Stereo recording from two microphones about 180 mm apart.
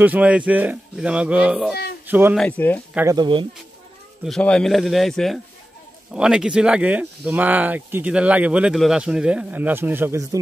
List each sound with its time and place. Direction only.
0.0 s speech: 10° right (ahead or behind)
2.3 s speech: 5° left (ahead or behind)
2.9 s speech: 10° right (ahead or behind)
3.2 s speech: 25° right (ahead or behind)
4.2 s a man's voice: 5° left (ahead or behind); by 10.4 s 15° right (ahead or behind)